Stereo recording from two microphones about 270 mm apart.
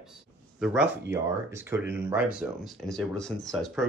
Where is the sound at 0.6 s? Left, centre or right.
Centre.